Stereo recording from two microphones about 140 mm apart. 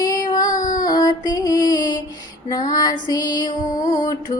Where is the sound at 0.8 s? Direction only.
30° left (ahead or behind).